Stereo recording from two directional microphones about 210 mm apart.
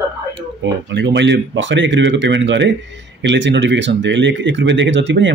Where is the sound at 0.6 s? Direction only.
55° right (ahead or behind).